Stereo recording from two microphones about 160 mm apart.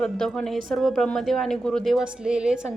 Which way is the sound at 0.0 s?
5° left (ahead or behind).